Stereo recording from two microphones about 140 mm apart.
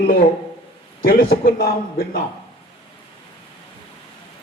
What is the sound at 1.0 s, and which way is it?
Speech, 90° left.